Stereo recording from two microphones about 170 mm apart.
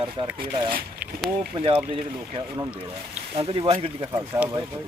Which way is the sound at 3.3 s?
35° right (ahead or behind).